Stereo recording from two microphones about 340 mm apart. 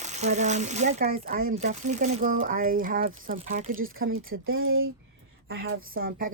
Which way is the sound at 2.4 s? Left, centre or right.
Right.